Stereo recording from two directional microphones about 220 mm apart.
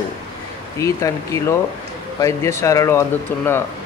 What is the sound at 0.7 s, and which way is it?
Speech, 15° left (ahead or behind).